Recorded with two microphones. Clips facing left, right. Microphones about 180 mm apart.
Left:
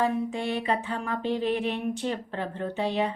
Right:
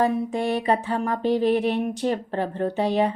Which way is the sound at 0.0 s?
40° right (ahead or behind).